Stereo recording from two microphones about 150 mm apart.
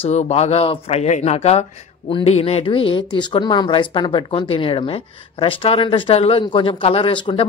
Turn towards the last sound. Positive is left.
turn(degrees=35)  # may be behind; listen again after turning